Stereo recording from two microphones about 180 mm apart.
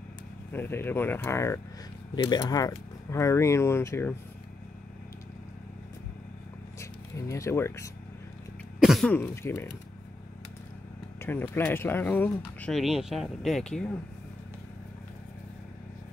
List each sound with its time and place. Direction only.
0.5 s speech: 10° left (ahead or behind)
6.8 s speech: 15° left (ahead or behind)
8.7 s cough: centre (ahead or behind)
9.1 s speech: 15° left (ahead or behind)
11.1 s vehicle: 10° left (ahead or behind)
11.4 s speech: 10° left (ahead or behind)